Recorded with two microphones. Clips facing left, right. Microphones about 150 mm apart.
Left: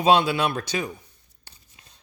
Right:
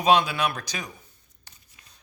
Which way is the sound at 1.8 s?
30° left (ahead or behind).